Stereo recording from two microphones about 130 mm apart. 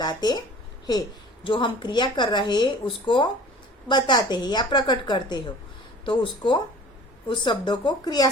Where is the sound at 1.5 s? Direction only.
40° left (ahead or behind).